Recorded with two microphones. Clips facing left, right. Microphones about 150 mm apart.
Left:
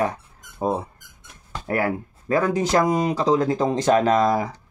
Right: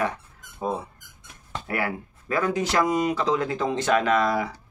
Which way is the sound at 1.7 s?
45° left (ahead or behind).